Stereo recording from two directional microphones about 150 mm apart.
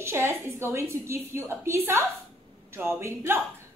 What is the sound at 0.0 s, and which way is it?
A woman's voice, 15° right (ahead or behind).